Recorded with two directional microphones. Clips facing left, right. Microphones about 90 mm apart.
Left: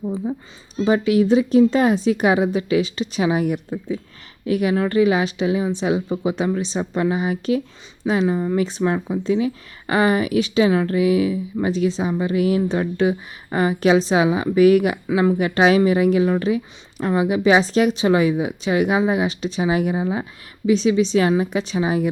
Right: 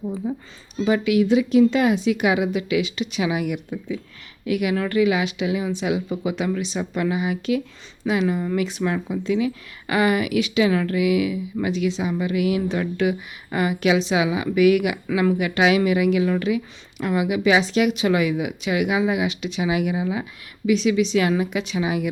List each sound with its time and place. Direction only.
0.9 s speech: 35° left (ahead or behind)